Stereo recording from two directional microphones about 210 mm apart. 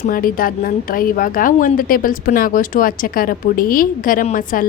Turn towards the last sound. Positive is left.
turn(degrees=40)  # may be behind; listen again after turning